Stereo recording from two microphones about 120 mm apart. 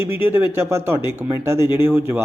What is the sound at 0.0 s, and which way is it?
A man's voice, 20° right (ahead or behind).